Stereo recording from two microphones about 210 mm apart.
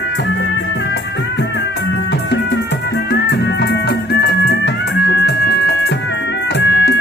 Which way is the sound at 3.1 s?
55° left (ahead or behind).